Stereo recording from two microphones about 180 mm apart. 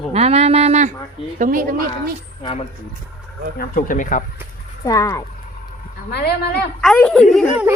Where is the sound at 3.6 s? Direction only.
50° left (ahead or behind).